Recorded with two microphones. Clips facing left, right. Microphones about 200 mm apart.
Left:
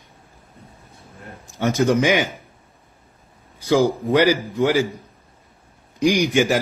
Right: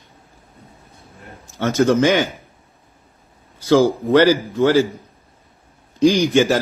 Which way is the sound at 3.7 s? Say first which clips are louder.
Right 3 dB; 15° left (ahead or behind).